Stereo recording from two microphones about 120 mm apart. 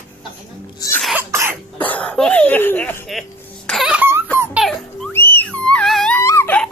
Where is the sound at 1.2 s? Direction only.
20° right (ahead or behind).